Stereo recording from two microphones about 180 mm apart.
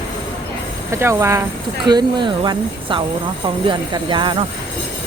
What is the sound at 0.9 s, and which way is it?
Speech, 15° right (ahead or behind).